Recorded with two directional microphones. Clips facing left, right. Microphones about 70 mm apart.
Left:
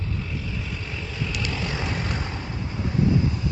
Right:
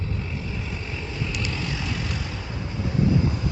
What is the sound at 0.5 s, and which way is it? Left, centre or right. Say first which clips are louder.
Vehicle: even; centre.